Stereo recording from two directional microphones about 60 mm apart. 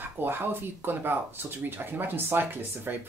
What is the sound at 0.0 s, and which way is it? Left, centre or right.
Speech, right.